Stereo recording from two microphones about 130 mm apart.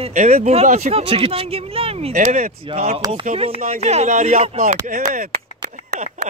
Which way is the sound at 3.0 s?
30° right (ahead or behind).